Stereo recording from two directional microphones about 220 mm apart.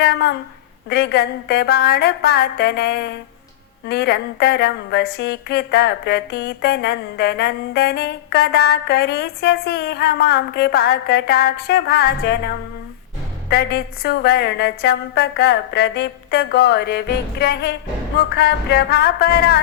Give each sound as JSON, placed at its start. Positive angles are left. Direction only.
{"t": 0.0, "sound": "a sound", "side_deg": 50}
{"t": 0.9, "sound": "speech", "side_deg": 50}
{"t": 13.5, "sound": "speech", "side_deg": 45}